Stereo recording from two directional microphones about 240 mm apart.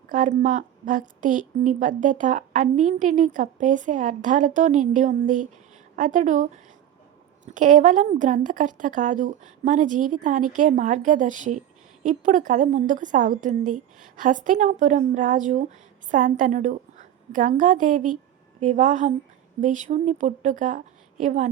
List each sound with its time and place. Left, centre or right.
0.1 s a woman's voice: right